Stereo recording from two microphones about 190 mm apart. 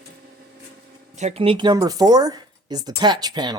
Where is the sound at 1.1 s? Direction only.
35° right (ahead or behind).